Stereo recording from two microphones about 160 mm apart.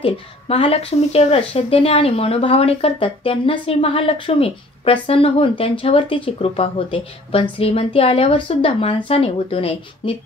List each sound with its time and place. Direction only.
0.0 s speech: 35° left (ahead or behind)